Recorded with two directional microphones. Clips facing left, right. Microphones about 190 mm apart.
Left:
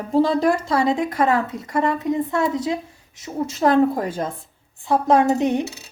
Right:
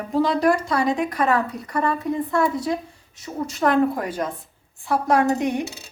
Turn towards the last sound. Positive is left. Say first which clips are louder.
# left 2 dB
turn(degrees=25)  # may be behind; listen again after turning